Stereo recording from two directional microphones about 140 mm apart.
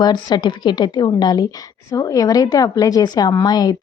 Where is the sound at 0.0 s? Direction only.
30° left (ahead or behind).